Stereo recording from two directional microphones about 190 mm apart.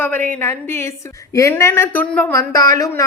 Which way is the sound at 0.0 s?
10° left (ahead or behind).